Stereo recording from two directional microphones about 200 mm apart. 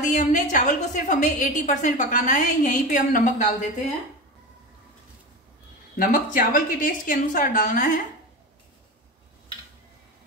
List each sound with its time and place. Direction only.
0.0 s a woman's voice: 40° left (ahead or behind)
5.9 s a woman's voice: 45° left (ahead or behind)